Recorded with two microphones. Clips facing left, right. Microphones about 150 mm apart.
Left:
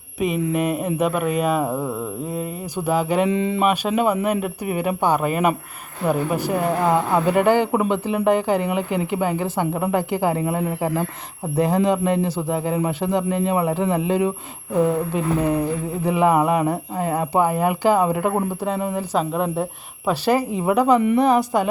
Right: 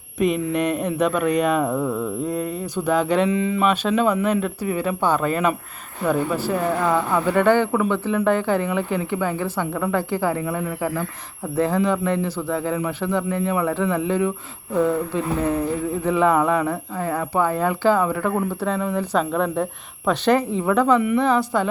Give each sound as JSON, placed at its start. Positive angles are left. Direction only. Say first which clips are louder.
{"t": 0.2, "sound": "speech", "louder": "right 1 dB", "side_deg": 5}
{"t": 3.2, "sound": "speech", "louder": "even", "side_deg": 30}
{"t": 3.6, "sound": "a woman's voice", "louder": "even", "side_deg": 10}
{"t": 6.8, "sound": "a woman's voice", "louder": "left 4 dB", "side_deg": 25}
{"t": 10.4, "sound": "speech", "louder": "left 3 dB", "side_deg": 30}
{"t": 11.5, "sound": "a woman's voice", "louder": "left 1 dB", "side_deg": 15}